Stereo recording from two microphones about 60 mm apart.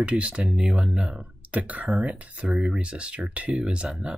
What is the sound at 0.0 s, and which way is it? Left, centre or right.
Speech, right.